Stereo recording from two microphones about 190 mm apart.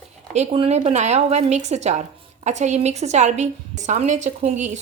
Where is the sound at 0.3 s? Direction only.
30° right (ahead or behind).